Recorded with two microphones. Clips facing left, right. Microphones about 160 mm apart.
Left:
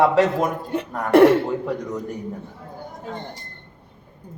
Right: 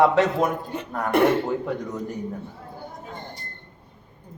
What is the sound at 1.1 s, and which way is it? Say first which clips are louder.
Speech: left 7 dB; 65° left (ahead or behind).